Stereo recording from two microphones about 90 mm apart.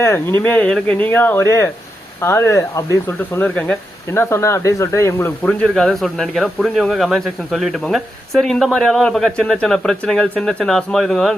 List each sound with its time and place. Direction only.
0.0 s speech: 25° left (ahead or behind)
3.1 s speech: 20° left (ahead or behind)
4.1 s speech: 30° left (ahead or behind)
5.4 s speech: 15° left (ahead or behind)
5.6 s speech: 5° left (ahead or behind)